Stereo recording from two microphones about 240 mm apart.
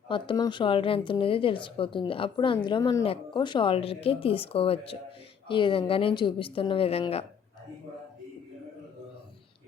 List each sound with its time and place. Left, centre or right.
0.1 s a woman's voice: centre